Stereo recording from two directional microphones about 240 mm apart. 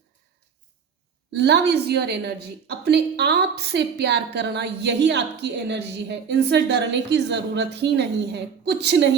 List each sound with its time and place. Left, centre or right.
1.3 s a woman's voice: right